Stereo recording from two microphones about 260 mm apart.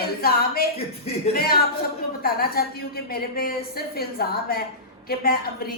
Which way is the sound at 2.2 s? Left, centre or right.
Left.